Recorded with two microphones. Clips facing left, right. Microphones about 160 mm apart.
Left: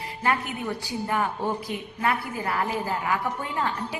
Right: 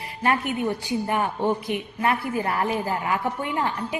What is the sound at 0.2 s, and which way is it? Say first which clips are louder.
A woman's voice: right 4 dB; 20° right (ahead or behind).